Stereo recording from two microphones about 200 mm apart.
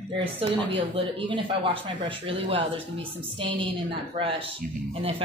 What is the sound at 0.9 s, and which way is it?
Speech, 25° right (ahead or behind).